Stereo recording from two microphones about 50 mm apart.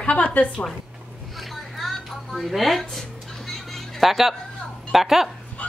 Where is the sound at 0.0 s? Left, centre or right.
Left.